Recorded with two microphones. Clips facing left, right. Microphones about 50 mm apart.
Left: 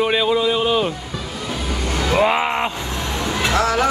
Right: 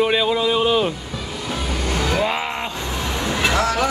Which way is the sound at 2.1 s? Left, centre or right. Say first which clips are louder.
Left 6 dB; centre.